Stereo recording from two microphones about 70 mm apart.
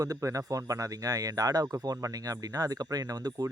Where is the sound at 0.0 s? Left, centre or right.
Right.